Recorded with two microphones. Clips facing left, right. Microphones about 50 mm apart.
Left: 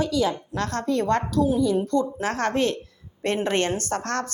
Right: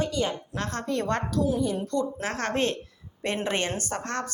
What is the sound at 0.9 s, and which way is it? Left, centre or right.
Speech, right.